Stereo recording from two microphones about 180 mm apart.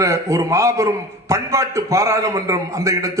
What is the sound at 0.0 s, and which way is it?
A man's voice, 15° right (ahead or behind).